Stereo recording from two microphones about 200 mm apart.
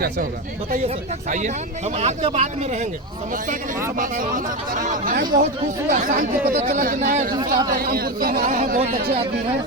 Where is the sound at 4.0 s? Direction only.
40° right (ahead or behind).